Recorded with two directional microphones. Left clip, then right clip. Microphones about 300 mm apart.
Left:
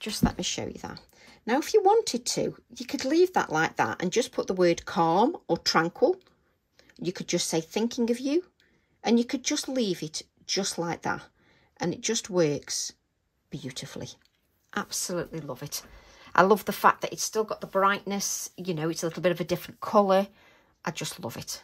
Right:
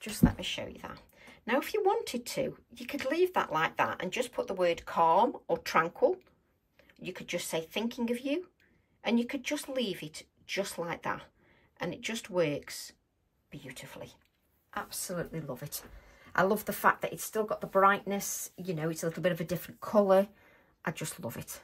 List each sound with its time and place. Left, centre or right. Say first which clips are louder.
0.1 s speech: left 2 dB; centre
15.3 s speech: left 4 dB; centre